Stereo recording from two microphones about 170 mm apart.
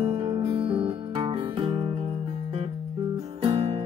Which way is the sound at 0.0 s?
30° right (ahead or behind).